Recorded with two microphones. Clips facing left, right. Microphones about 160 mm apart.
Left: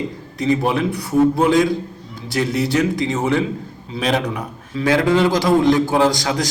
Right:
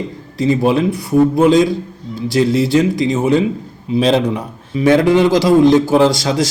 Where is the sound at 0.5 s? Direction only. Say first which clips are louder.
Right 4 dB; 25° right (ahead or behind).